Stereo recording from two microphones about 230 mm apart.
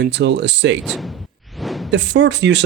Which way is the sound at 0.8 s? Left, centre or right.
Centre.